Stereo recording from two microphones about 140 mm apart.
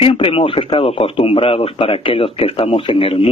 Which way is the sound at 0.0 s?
40° left (ahead or behind).